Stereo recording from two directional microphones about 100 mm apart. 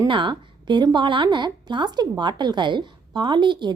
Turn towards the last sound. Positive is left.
turn(degrees=-50)  # may be behind; listen again after turning